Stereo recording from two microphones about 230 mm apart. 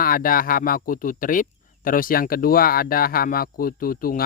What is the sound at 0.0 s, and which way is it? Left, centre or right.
Speech, left.